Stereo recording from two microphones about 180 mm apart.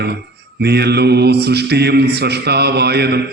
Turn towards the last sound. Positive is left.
turn(degrees=-65)  # may be behind; listen again after turning